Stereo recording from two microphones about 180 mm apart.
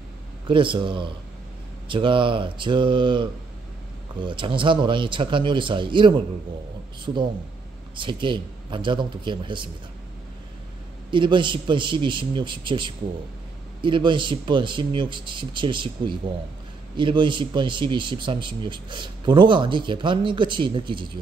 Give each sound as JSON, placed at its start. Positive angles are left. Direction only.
{"t": 0.5, "sound": "speech", "side_deg": -30}
{"t": 7.9, "sound": "speech", "side_deg": -25}
{"t": 11.1, "sound": "speech", "side_deg": -25}